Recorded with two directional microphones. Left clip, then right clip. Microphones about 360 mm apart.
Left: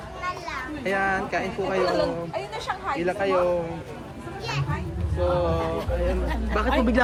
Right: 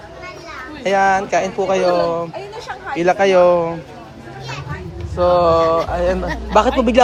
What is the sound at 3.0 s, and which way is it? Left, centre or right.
Speech, centre.